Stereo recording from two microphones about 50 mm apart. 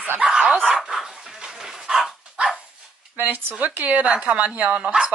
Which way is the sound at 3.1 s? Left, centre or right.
Right.